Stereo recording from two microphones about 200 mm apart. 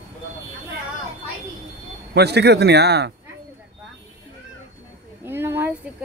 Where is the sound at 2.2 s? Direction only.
55° right (ahead or behind).